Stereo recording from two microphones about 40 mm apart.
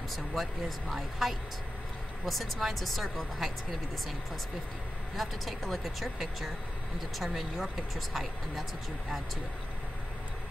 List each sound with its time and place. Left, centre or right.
0.1 s speech: centre
5.1 s speech: centre